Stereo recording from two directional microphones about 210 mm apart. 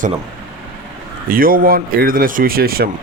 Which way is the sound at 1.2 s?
45° right (ahead or behind).